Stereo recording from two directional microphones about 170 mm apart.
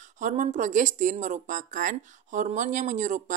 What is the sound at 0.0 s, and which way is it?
Speech, 45° right (ahead or behind).